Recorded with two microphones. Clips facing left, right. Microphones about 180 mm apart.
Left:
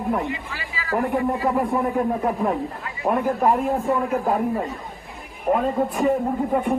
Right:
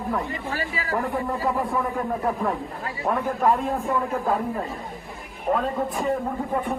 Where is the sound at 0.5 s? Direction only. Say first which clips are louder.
Right 5 dB; 45° right (ahead or behind).